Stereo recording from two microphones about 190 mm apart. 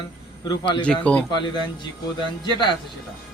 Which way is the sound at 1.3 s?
25° left (ahead or behind).